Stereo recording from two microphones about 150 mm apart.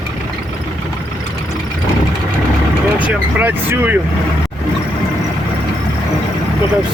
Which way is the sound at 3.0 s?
10° right (ahead or behind).